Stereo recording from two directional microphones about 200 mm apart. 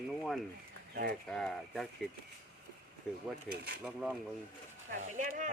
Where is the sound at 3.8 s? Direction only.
Centre (ahead or behind).